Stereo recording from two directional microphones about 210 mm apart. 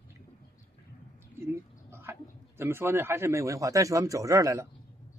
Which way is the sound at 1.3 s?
10° right (ahead or behind).